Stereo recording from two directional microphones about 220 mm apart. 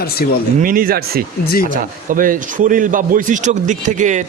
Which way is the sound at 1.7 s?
40° right (ahead or behind).